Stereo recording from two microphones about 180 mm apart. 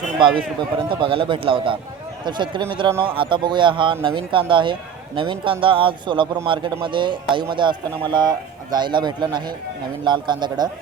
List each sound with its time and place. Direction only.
0.9 s a man's voice: 25° right (ahead or behind)